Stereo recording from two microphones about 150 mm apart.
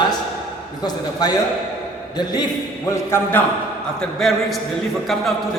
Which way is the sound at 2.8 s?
20° left (ahead or behind).